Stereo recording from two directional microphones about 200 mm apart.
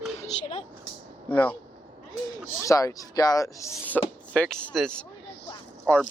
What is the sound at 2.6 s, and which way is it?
Speech, 15° left (ahead or behind).